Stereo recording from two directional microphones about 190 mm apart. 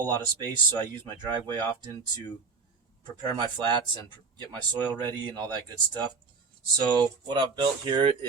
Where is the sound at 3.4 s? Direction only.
25° right (ahead or behind).